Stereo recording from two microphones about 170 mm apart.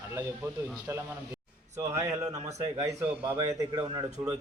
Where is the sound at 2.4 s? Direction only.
40° right (ahead or behind).